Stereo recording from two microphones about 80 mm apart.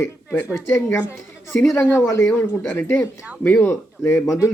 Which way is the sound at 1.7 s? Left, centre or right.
Left.